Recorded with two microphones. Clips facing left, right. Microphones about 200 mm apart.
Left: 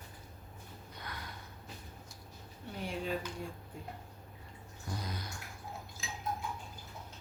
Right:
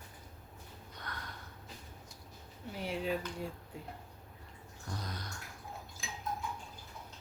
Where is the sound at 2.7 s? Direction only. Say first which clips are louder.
Right 2 dB; 5° right (ahead or behind).